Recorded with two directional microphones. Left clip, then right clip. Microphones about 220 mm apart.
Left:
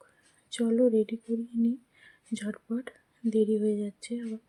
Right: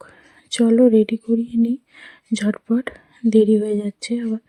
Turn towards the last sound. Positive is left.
turn(degrees=-35)  # may be behind; listen again after turning